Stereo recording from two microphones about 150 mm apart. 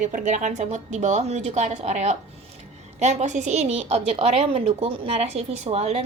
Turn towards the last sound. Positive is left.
turn(degrees=-45)  # may be behind; listen again after turning